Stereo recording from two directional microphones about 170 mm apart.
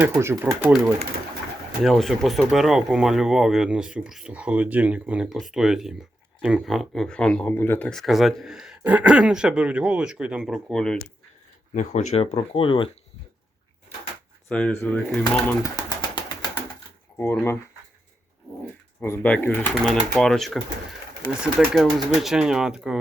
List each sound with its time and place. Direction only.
0.0 s speech: 15° right (ahead or behind)
1.8 s speech: centre (ahead or behind)
11.7 s speech: 45° left (ahead or behind); by 12.9 s 30° left (ahead or behind)
14.5 s speech: 5° left (ahead or behind)
15.7 s pigeon: 30° left (ahead or behind)
18.9 s speech: 10° left (ahead or behind); by 23.0 s 5° right (ahead or behind)